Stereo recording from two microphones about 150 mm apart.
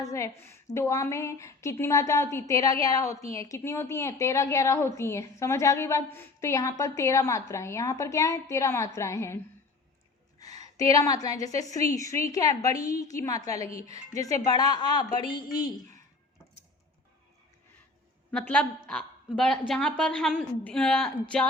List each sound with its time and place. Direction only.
0.0 s a woman's voice: 20° left (ahead or behind)
10.4 s a woman's voice: 25° left (ahead or behind)
18.3 s a woman's voice: 10° left (ahead or behind)